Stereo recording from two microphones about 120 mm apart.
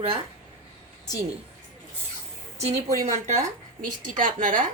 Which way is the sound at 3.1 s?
80° right.